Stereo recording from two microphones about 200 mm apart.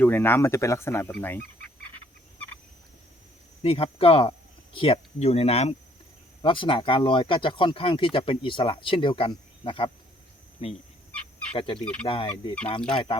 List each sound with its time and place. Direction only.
0.0 s speech: 10° left (ahead or behind)
3.6 s speech: 30° left (ahead or behind)